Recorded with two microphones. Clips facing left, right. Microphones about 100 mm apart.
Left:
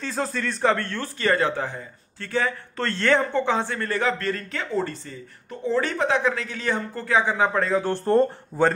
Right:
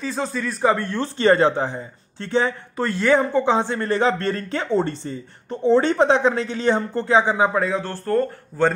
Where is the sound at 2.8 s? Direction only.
10° right (ahead or behind).